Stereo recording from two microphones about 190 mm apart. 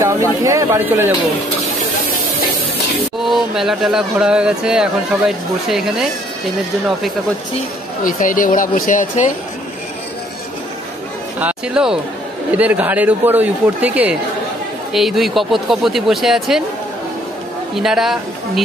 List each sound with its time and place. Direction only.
0.0 s speech: 15° right (ahead or behind)
3.3 s speech: centre (ahead or behind)
8.0 s speech: 45° left (ahead or behind)
11.3 s speech: 5° right (ahead or behind)
17.7 s speech: centre (ahead or behind)